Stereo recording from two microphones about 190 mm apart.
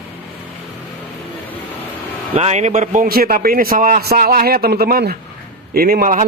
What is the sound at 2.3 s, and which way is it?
A man's voice, 35° right (ahead or behind).